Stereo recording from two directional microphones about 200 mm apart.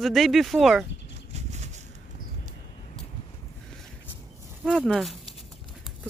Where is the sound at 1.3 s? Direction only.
35° right (ahead or behind).